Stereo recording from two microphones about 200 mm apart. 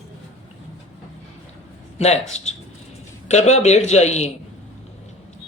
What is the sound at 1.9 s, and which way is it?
A man's voice, 35° left (ahead or behind).